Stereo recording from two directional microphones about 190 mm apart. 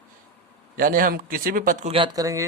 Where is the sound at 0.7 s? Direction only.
50° right (ahead or behind).